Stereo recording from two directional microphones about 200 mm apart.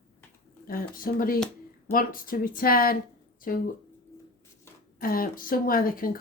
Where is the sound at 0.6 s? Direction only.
45° left (ahead or behind).